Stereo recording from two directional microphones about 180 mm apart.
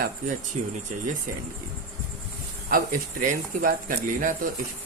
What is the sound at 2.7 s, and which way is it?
Speech, 50° right (ahead or behind).